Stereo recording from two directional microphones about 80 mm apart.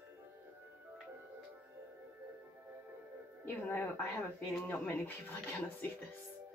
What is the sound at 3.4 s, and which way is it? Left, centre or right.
Speech, left.